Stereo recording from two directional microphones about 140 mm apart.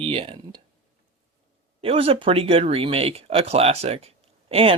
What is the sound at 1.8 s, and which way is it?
Speech, 45° right (ahead or behind).